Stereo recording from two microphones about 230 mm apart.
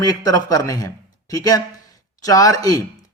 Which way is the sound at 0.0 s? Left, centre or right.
Centre.